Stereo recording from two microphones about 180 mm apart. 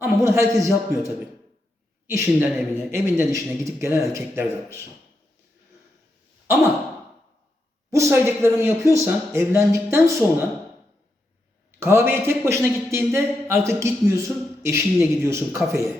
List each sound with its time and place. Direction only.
0.0 s a man's voice: 15° right (ahead or behind)
7.9 s a man's voice: 15° right (ahead or behind)
11.8 s a man's voice: 15° right (ahead or behind)